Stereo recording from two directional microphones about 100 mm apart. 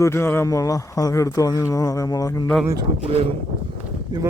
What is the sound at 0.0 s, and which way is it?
A man's voice, 25° left (ahead or behind).